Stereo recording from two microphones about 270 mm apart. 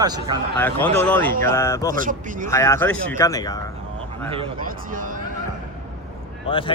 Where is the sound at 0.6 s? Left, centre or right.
Centre.